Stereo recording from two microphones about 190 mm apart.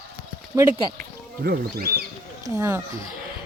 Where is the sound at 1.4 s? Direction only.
50° right (ahead or behind).